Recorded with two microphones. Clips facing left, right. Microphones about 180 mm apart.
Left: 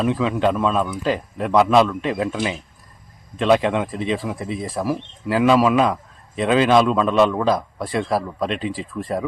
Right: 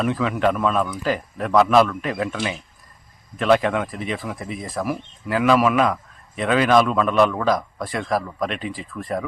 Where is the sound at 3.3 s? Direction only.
25° left (ahead or behind).